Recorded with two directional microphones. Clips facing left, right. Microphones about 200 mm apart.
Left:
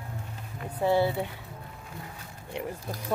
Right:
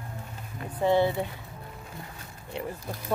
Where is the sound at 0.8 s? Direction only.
10° left (ahead or behind).